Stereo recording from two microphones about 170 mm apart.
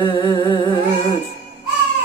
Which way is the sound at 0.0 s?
25° left (ahead or behind).